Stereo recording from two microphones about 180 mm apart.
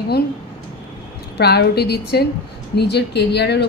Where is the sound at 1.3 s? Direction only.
65° left (ahead or behind).